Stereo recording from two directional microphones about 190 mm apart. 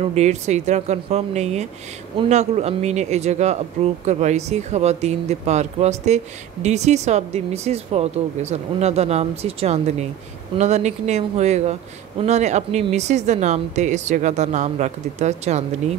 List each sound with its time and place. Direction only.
0.0 s speech: 35° right (ahead or behind)